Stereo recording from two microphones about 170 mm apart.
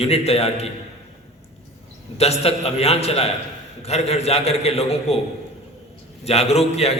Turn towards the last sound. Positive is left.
turn(degrees=35)  # may be behind; listen again after turning